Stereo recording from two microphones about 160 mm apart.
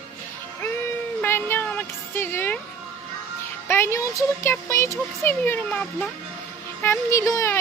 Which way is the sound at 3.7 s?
15° left (ahead or behind).